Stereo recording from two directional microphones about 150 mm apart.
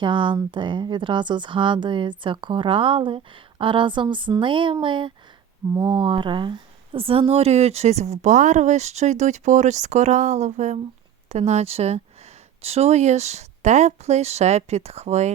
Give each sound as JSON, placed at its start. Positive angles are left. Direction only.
{"t": 0.0, "sound": "speech", "side_deg": -30}